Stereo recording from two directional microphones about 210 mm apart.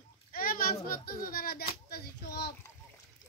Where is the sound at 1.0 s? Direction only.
45° left (ahead or behind).